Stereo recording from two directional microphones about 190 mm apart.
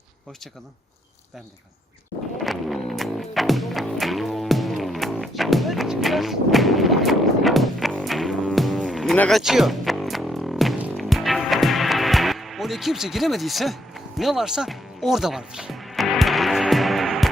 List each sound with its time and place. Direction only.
2.4 s music: centre (ahead or behind)